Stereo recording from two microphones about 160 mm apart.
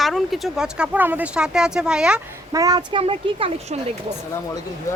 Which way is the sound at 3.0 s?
35° right (ahead or behind).